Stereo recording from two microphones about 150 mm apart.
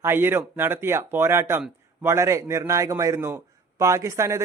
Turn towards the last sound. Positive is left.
turn(degrees=-20)  # may be behind; listen again after turning